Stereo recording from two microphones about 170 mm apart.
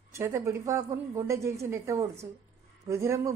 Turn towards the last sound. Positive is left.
turn(degrees=-15)  # may be behind; listen again after turning